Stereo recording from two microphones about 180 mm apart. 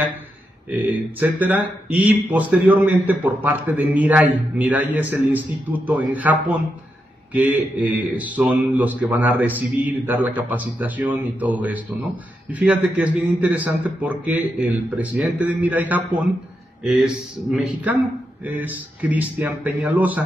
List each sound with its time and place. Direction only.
1.2 s a man's voice: 10° right (ahead or behind)
7.3 s a man's voice: 10° right (ahead or behind)